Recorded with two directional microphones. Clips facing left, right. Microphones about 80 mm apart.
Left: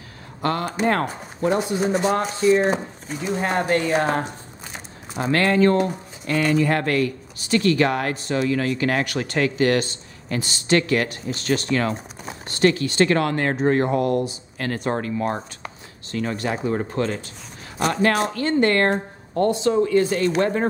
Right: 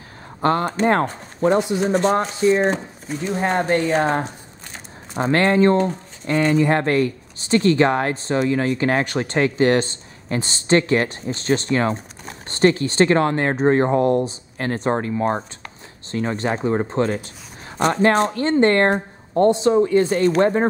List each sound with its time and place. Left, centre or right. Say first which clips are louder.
0.4 s speech: right 5 dB; right
1.8 s speech: right 2 dB; centre
5.1 s speech: right 2 dB; right